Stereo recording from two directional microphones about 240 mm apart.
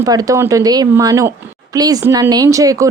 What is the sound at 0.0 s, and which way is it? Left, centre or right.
A woman's voice, centre.